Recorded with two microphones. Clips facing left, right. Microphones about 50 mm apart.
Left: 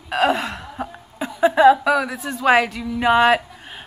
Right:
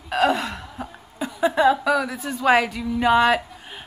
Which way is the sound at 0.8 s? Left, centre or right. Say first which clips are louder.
Left 3 dB; centre.